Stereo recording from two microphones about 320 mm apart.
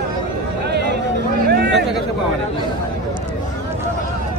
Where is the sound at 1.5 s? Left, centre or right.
Right.